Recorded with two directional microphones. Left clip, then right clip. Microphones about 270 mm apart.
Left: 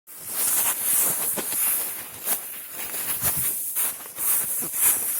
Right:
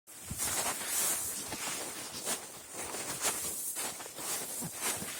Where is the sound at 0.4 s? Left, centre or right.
Left.